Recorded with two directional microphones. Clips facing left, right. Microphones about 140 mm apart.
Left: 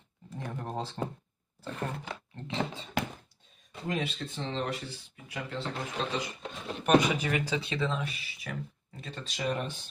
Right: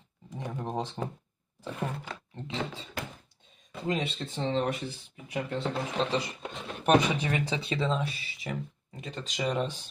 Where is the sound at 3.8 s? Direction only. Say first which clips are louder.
Right 2 dB; 20° right (ahead or behind).